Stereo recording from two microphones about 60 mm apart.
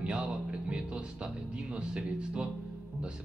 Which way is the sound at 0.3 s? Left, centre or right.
Centre.